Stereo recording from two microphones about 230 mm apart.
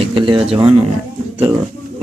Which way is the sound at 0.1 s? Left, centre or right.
Right.